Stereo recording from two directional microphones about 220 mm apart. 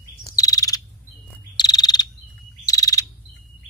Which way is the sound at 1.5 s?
20° left (ahead or behind).